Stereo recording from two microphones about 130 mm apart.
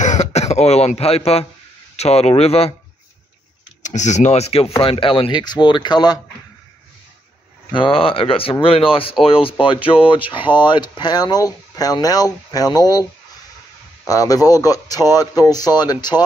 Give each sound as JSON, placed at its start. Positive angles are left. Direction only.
{"t": 0.0, "sound": "throat clearing", "side_deg": 65}
{"t": 2.0, "sound": "speech", "side_deg": 55}
{"t": 3.8, "sound": "speech", "side_deg": 65}
{"t": 7.7, "sound": "speech", "side_deg": 45}
{"t": 14.0, "sound": "speech", "side_deg": 25}